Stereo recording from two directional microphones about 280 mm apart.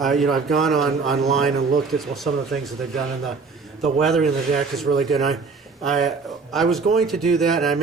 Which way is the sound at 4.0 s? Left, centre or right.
Centre.